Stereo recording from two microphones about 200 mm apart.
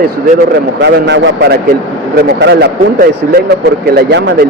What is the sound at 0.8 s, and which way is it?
Speech, 60° right (ahead or behind).